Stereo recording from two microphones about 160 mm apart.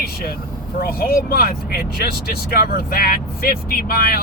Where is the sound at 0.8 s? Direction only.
70° left (ahead or behind).